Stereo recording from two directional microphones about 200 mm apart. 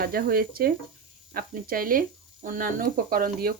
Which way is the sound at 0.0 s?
45° right (ahead or behind).